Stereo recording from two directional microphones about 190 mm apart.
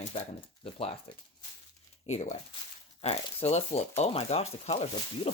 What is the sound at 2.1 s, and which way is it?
Speech, 40° left (ahead or behind).